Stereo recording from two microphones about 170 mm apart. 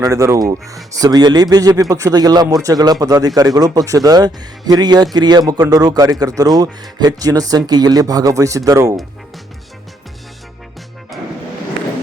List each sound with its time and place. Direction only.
0.0 s speech: 20° right (ahead or behind)